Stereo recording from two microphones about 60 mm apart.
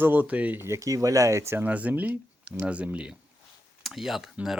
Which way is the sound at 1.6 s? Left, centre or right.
Right.